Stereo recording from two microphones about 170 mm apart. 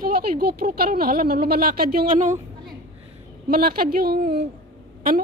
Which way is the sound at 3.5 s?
60° right (ahead or behind).